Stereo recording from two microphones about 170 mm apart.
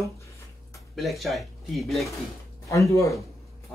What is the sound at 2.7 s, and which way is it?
Speech, 20° left (ahead or behind).